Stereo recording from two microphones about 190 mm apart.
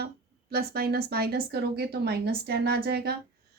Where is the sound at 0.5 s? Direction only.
55° right (ahead or behind).